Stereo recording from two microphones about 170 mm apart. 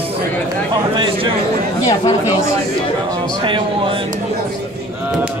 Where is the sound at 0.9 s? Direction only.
30° right (ahead or behind).